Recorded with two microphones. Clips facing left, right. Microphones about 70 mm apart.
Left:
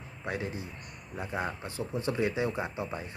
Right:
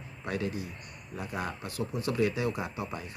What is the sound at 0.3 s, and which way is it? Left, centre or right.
Speech, left.